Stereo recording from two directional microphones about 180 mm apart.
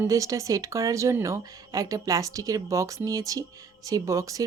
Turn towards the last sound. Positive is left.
turn(degrees=-20)  # may be behind; listen again after turning